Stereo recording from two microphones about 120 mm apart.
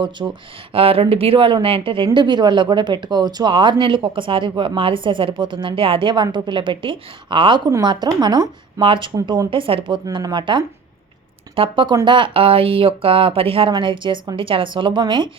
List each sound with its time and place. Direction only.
0.2 s a woman's voice: 35° right (ahead or behind)
0.7 s a woman's voice: 50° right (ahead or behind)